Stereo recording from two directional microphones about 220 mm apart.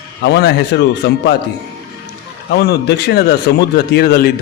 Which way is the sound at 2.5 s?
50° left (ahead or behind).